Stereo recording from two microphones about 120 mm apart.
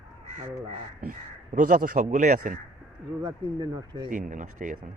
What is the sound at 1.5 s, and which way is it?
A man's voice, 90° right.